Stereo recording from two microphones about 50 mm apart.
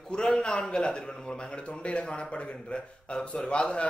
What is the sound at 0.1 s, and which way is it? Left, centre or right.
A man's voice, centre.